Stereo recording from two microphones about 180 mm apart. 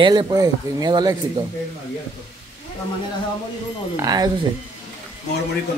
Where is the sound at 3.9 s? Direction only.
20° right (ahead or behind).